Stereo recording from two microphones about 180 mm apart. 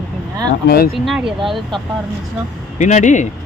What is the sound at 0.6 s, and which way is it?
Speech, 60° left (ahead or behind).